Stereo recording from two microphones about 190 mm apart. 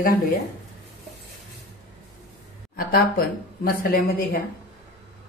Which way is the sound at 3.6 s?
50° left (ahead or behind).